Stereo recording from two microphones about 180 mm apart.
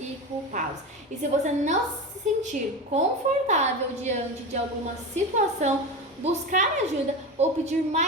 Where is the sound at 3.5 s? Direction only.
40° right (ahead or behind).